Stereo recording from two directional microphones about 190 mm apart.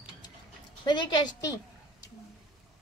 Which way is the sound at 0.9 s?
25° left (ahead or behind).